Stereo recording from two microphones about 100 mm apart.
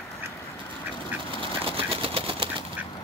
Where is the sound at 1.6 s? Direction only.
70° right (ahead or behind).